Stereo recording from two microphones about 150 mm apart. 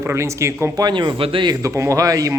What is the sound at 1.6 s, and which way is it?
Speech, 20° right (ahead or behind).